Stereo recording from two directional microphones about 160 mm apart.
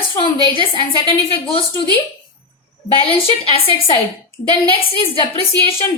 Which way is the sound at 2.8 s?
35° left (ahead or behind).